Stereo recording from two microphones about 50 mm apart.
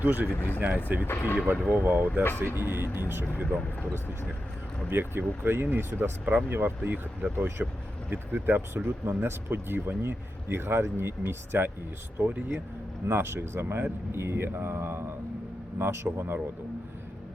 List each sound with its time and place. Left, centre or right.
0.0 s speech: right
0.3 s speech: left
1.5 s speech: right
4.9 s speech: right
6.5 s speech: right
12.2 s speech: right
13.1 s speech: right